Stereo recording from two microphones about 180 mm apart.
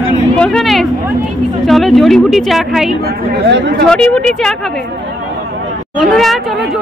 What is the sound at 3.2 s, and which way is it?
Speech, 75° right (ahead or behind).